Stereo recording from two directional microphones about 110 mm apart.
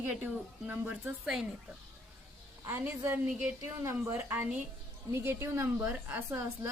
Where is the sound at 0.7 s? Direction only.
15° right (ahead or behind).